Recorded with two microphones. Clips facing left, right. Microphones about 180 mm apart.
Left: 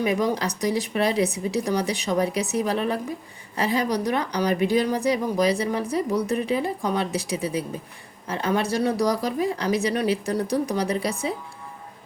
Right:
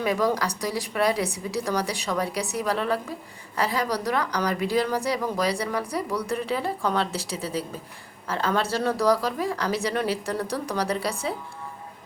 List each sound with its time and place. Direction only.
0.0 s a woman's voice: 20° left (ahead or behind)